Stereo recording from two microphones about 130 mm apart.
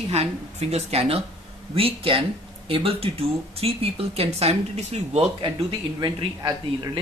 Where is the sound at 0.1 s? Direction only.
55° right (ahead or behind); by 6.9 s 30° right (ahead or behind).